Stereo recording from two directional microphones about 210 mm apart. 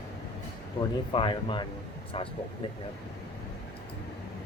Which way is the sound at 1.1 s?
25° left (ahead or behind).